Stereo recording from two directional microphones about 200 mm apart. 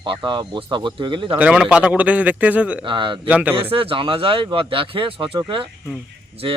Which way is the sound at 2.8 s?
25° right (ahead or behind).